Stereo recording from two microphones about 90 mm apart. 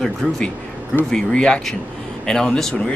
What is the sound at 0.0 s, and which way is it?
Speech, 5° left (ahead or behind).